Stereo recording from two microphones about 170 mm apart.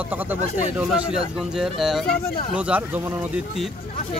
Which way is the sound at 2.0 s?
65° left (ahead or behind).